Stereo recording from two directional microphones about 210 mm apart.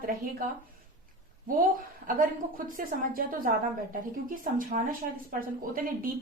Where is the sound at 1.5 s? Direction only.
40° right (ahead or behind).